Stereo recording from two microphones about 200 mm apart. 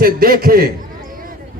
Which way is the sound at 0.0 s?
45° right (ahead or behind).